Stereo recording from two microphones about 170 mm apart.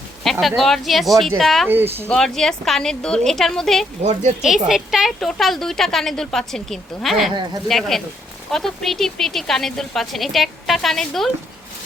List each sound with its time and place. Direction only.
0.3 s speech: centre (ahead or behind)
1.6 s speech: 15° right (ahead or behind)
2.0 s speech: 5° left (ahead or behind)
4.0 s speech: 40° right (ahead or behind)
4.7 s speech: centre (ahead or behind)